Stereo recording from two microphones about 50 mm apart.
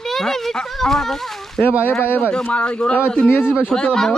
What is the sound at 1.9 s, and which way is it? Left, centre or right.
Speech, left.